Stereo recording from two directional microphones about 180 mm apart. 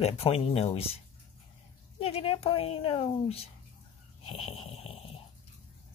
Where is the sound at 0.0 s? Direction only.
35° left (ahead or behind).